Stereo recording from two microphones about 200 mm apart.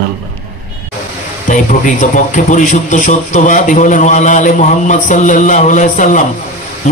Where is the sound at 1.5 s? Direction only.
40° left (ahead or behind).